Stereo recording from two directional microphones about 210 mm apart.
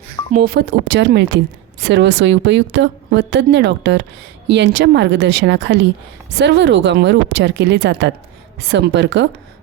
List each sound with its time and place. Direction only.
0.3 s a woman's voice: 45° right (ahead or behind)